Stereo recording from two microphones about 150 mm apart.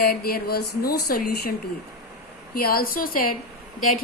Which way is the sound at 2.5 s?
85° left.